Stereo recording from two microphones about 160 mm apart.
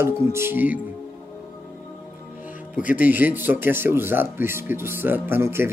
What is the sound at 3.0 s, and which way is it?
Speech, 10° right (ahead or behind).